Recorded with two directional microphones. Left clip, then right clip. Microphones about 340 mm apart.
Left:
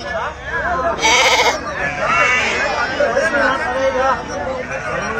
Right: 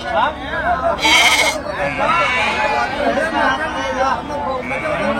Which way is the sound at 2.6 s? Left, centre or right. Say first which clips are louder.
Right 1 dB; centre.